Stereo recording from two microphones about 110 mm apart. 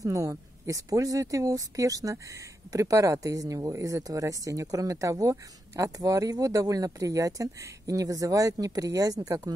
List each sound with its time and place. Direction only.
0.0 s speech: 30° right (ahead or behind)